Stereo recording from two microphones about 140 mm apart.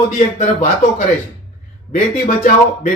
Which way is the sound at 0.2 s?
60° left (ahead or behind).